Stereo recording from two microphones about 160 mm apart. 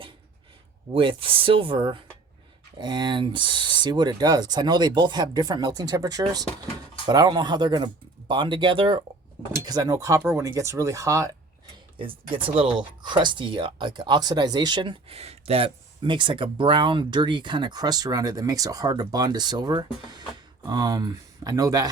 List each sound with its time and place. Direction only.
0.9 s speech: 30° right (ahead or behind)
9.6 s speech: 20° right (ahead or behind)
13.0 s speech: 30° right (ahead or behind)